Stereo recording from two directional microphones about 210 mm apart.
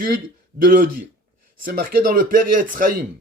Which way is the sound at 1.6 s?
45° right (ahead or behind).